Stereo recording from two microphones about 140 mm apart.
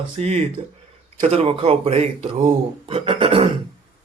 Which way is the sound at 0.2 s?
50° right (ahead or behind).